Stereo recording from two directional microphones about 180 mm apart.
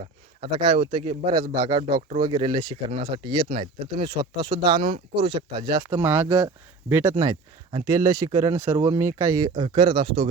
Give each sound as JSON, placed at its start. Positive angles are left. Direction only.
{"t": 0.7, "sound": "speech", "side_deg": -25}
{"t": 5.7, "sound": "speech", "side_deg": -15}